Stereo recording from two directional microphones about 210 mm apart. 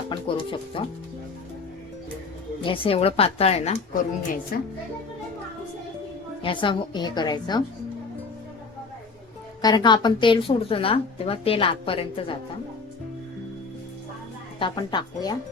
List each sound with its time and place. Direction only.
0.1 s speech: 25° left (ahead or behind)
2.6 s speech: 25° left (ahead or behind)
4.5 s speech: 45° left (ahead or behind)
6.4 s speech: 25° left (ahead or behind)
9.6 s speech: 20° left (ahead or behind)
14.6 s speech: 20° left (ahead or behind)